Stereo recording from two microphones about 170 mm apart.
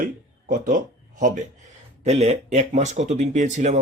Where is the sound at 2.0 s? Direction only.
40° right (ahead or behind).